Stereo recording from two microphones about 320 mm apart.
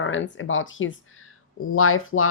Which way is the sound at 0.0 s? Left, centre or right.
Left.